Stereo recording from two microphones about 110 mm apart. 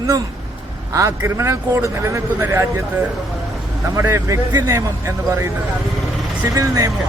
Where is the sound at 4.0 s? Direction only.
25° right (ahead or behind).